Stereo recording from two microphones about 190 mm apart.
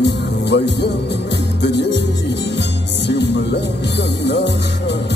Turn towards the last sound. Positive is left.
turn(degrees=65)  # may be behind; listen again after turning